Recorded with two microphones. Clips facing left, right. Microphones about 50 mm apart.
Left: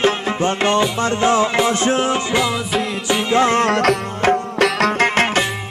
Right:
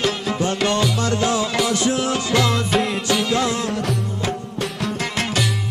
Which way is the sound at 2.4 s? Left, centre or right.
Centre.